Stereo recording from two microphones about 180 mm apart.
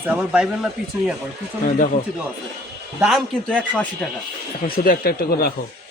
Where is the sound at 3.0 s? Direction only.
Centre (ahead or behind).